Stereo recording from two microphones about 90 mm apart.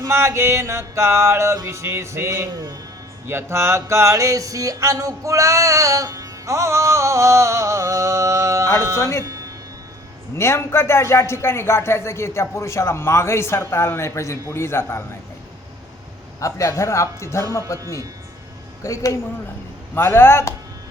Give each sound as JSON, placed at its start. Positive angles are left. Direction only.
{"t": 0.1, "sound": "music", "side_deg": -30}
{"t": 9.0, "sound": "speech", "side_deg": 30}
{"t": 9.2, "sound": "music", "side_deg": -40}
{"t": 10.3, "sound": "a man's voice", "side_deg": 30}
{"t": 16.4, "sound": "a man's voice", "side_deg": 35}